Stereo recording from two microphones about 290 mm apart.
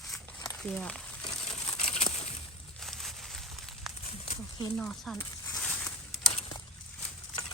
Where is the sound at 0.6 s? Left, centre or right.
Centre.